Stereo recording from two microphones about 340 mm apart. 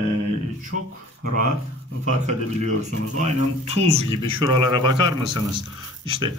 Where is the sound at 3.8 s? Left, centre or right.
Centre.